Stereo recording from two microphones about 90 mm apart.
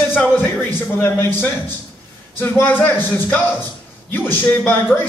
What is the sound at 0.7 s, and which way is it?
A man's voice, 25° left (ahead or behind).